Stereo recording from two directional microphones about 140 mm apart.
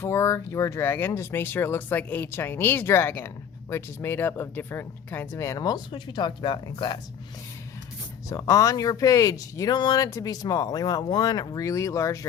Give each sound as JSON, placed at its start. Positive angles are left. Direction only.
{"t": 0.0, "sound": "speech", "side_deg": 20}
{"t": 8.3, "sound": "speech", "side_deg": 25}